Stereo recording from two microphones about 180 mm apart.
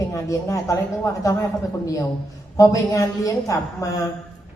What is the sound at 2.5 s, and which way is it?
A woman's voice, 20° left (ahead or behind).